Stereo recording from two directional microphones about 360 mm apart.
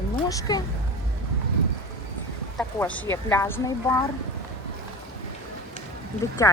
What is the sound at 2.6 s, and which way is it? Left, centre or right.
Speech, centre.